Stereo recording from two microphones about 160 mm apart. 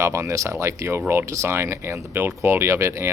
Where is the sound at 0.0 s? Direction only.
20° right (ahead or behind).